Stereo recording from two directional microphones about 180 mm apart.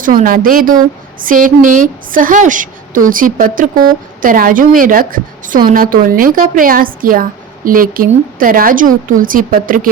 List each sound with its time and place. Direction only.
0.0 s a woman's voice: 50° right (ahead or behind)